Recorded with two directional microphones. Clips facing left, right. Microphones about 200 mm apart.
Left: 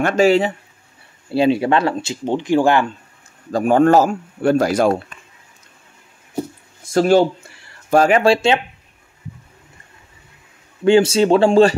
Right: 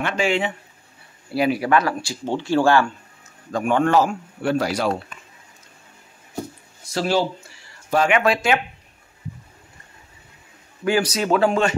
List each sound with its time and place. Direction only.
0.0 s speech: 40° left (ahead or behind)
1.3 s speech: 25° left (ahead or behind)
3.5 s a man's voice: 40° left (ahead or behind)
6.8 s speech: 50° left (ahead or behind)
7.9 s speech: 40° left (ahead or behind)
10.8 s speech: 25° left (ahead or behind)